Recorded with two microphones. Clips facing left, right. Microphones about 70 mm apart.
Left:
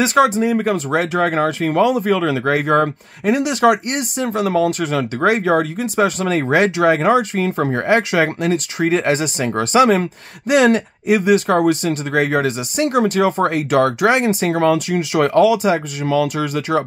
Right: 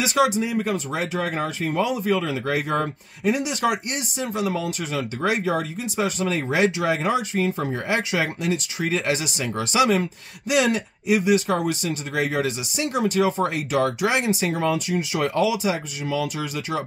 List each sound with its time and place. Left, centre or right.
0.0 s speech: left
14.5 s speech: left